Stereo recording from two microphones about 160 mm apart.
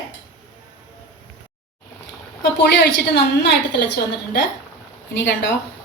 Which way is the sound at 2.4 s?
90° left.